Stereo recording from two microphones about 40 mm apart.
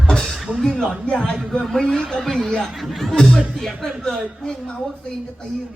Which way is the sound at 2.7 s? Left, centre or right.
Centre.